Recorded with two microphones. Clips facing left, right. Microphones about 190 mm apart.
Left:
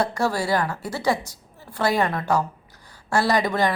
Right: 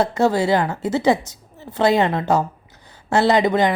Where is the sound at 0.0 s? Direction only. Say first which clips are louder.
Right 6 dB; 20° right (ahead or behind).